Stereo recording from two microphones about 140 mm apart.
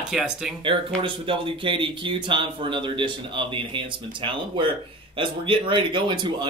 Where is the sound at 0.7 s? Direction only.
40° right (ahead or behind).